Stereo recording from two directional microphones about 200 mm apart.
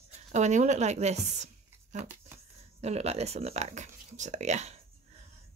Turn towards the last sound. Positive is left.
turn(degrees=-35)  # may be behind; listen again after turning